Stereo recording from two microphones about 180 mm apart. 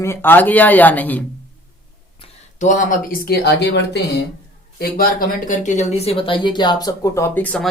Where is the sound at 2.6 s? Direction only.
45° left (ahead or behind); by 4.2 s 70° left (ahead or behind).